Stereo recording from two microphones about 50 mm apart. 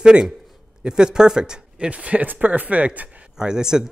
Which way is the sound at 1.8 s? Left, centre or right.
Right.